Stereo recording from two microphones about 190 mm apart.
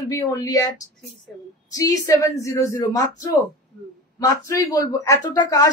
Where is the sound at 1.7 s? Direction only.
20° left (ahead or behind).